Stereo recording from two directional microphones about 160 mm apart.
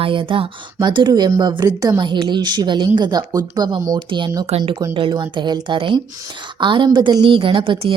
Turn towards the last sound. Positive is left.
turn(degrees=-30)  # may be behind; listen again after turning